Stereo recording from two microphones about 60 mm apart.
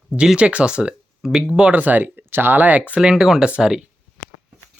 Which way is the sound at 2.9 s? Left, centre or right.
Centre.